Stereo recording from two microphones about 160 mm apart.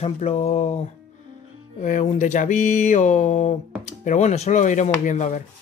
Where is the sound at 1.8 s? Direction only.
45° left (ahead or behind).